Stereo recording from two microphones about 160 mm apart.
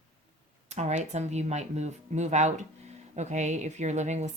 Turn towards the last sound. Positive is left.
turn(degrees=-45)  # may be behind; listen again after turning